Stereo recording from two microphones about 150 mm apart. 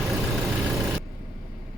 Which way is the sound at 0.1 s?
Centre (ahead or behind).